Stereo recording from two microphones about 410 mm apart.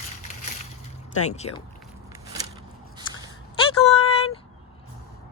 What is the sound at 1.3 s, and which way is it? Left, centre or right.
Speech, centre.